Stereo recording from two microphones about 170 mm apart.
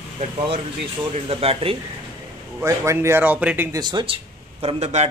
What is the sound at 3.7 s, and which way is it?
Speech, 30° right (ahead or behind).